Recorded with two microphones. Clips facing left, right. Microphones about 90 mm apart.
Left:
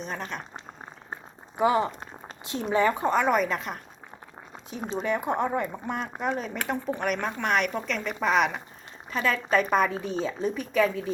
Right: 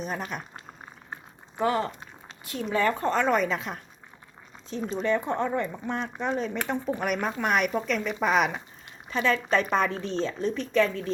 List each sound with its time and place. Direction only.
0.3 s a woman's voice: 5° right (ahead or behind)
1.5 s speech: 15° left (ahead or behind)
4.9 s a woman's voice: 10° left (ahead or behind)